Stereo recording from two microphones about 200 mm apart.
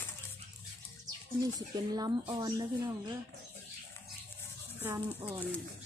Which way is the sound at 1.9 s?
20° right (ahead or behind).